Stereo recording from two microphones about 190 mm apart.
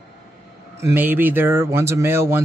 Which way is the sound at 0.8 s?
10° right (ahead or behind).